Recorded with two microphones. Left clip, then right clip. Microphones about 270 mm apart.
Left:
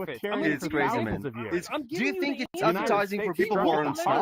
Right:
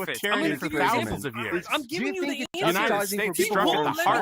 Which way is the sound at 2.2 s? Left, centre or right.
Centre.